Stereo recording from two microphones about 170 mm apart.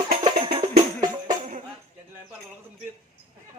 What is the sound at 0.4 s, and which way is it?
Music, 30° right (ahead or behind).